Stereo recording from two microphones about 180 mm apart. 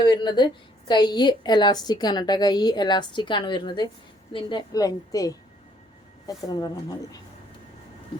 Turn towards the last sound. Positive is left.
turn(degrees=20)  # may be behind; listen again after turning